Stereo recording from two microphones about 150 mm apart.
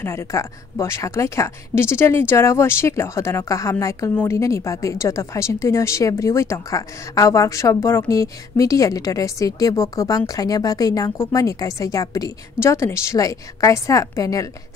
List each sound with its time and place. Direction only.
0.0 s a woman's voice: 15° left (ahead or behind)